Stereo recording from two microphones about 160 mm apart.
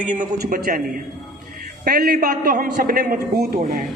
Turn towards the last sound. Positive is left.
turn(degrees=-65)  # may be behind; listen again after turning